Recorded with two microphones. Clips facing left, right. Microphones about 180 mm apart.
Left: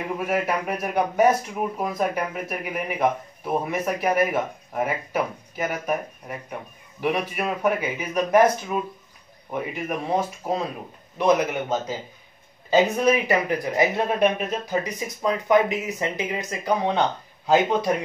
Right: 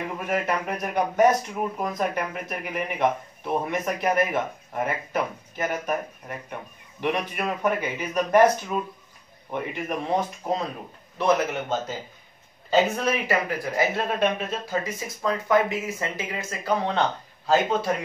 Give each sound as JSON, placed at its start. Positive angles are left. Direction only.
{"t": 0.2, "sound": "speech", "side_deg": 10}
{"t": 12.6, "sound": "speech", "side_deg": 15}